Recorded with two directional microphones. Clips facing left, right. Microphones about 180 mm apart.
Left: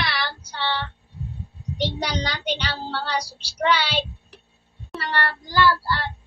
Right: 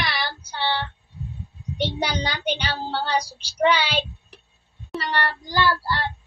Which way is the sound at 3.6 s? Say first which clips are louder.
Right 2 dB; 20° right (ahead or behind).